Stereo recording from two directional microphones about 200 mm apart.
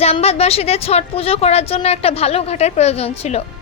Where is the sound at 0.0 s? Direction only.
30° left (ahead or behind).